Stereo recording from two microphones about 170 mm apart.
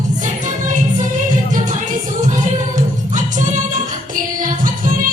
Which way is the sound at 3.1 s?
50° right (ahead or behind).